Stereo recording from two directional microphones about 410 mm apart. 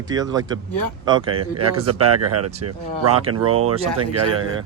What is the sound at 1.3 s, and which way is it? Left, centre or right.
Speech, right.